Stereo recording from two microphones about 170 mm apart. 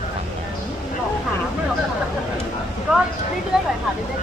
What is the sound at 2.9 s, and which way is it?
Speech, 5° right (ahead or behind).